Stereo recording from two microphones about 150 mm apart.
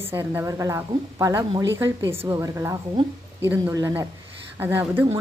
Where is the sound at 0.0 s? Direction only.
15° right (ahead or behind).